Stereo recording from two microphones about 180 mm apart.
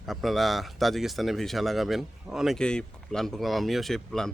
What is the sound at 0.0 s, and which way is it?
Speech, centre (ahead or behind).